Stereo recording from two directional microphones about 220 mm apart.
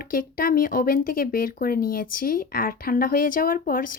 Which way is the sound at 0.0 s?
40° left (ahead or behind).